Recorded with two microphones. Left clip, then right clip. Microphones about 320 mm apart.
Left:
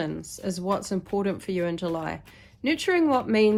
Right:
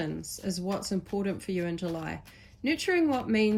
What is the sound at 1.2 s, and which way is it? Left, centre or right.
Speech, left.